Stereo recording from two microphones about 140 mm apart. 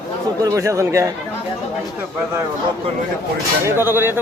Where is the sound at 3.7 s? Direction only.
15° right (ahead or behind).